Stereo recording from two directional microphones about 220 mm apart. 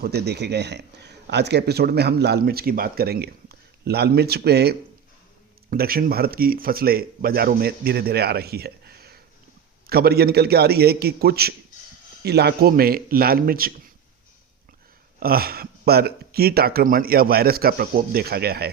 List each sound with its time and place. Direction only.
0.0 s speech: 50° right (ahead or behind)
5.7 s speech: 45° right (ahead or behind)
15.2 s speech: 45° right (ahead or behind)